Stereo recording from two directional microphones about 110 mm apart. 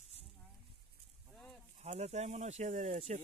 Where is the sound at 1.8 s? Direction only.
80° right.